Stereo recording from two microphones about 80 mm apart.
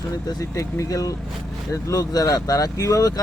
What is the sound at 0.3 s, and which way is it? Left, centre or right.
Speech, left.